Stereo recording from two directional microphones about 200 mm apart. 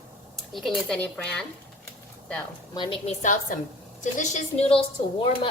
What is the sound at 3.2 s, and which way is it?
A woman's voice, 40° left (ahead or behind).